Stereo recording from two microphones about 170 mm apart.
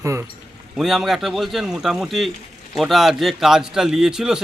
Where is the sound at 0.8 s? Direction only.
Centre (ahead or behind).